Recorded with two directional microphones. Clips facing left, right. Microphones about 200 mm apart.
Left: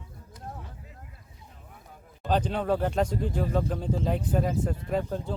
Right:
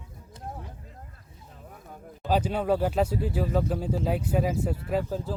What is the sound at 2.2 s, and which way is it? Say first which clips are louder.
Speech: right 1 dB; 10° right (ahead or behind).